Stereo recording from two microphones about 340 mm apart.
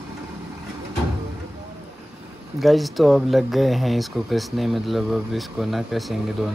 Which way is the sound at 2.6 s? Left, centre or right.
Centre.